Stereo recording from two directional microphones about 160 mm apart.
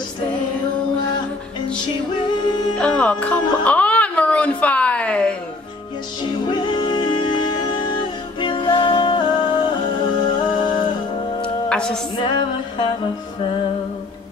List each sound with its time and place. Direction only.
2.8 s music: 5° left (ahead or behind)
3.6 s a sound: 10° left (ahead or behind)
6.2 s music: 30° left (ahead or behind)
11.4 s music: 5° left (ahead or behind)
12.2 s music: 30° left (ahead or behind)